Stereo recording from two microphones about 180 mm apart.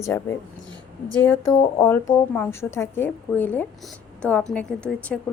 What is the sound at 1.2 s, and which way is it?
A woman's voice, 15° left (ahead or behind).